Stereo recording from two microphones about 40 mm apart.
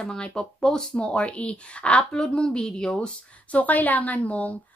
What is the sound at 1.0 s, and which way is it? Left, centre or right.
Speech, left.